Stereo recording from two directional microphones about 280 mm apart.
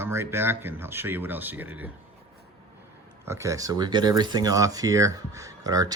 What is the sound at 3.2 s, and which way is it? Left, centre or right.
Speech, centre.